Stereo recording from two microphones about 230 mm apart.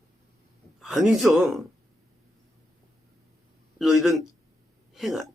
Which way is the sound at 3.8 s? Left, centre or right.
Centre.